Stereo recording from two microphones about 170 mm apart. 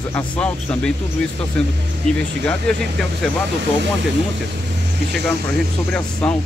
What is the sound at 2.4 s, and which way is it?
Speech, 5° left (ahead or behind).